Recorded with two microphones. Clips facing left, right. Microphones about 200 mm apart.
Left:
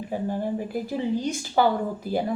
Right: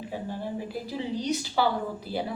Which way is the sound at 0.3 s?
50° left (ahead or behind).